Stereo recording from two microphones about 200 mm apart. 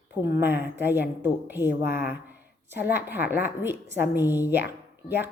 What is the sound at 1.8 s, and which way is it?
Speech, 50° left (ahead or behind).